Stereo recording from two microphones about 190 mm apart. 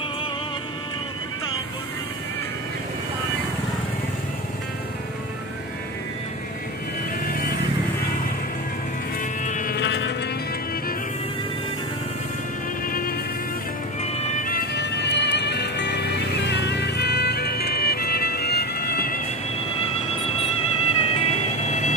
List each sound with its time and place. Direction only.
9.4 s vehicle: 40° left (ahead or behind)
9.8 s vehicle: 70° left (ahead or behind)
12.8 s music: 50° left (ahead or behind)
14.0 s music: 35° left (ahead or behind); by 19.2 s 50° left (ahead or behind)
20.9 s music: 30° left (ahead or behind)